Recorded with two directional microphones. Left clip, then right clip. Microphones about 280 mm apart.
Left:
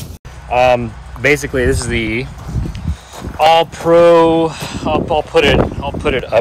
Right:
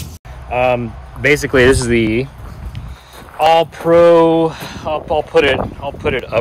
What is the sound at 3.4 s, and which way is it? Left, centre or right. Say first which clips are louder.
Speech: left 1 dB; centre.